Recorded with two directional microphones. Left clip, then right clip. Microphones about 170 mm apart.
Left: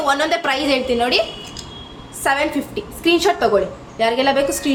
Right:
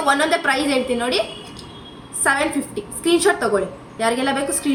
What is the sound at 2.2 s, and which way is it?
A woman's voice, 25° right (ahead or behind).